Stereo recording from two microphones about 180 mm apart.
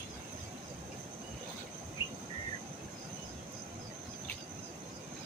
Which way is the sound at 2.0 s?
25° left (ahead or behind).